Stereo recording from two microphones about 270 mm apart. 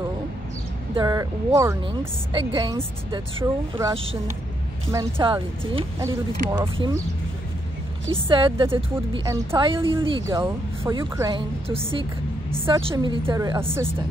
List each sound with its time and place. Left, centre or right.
0.9 s a woman's voice: centre
8.3 s a woman's voice: centre